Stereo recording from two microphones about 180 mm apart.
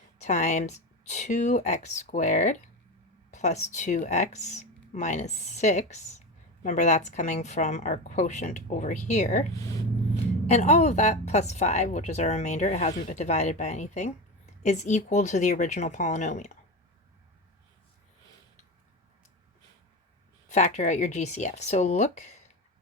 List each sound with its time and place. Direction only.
0.2 s a woman's voice: 40° left (ahead or behind)
20.5 s speech: 40° left (ahead or behind)